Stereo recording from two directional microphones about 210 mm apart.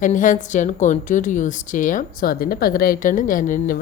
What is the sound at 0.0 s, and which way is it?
A woman's voice, 40° left (ahead or behind).